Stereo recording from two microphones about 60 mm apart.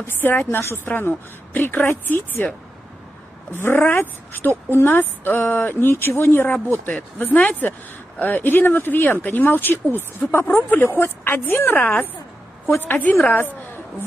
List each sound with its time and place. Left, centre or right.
0.0 s a woman's voice: left
3.5 s a woman's voice: left